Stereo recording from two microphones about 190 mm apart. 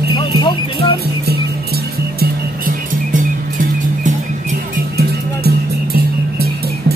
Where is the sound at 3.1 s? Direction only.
45° right (ahead or behind).